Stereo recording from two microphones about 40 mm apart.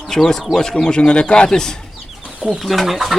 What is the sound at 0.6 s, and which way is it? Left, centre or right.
Speech, centre.